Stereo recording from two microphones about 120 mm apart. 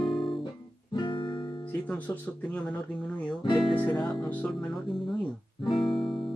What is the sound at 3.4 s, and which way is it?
Music, 40° left (ahead or behind).